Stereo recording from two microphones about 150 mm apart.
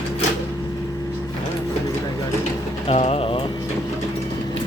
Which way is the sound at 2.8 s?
40° left (ahead or behind).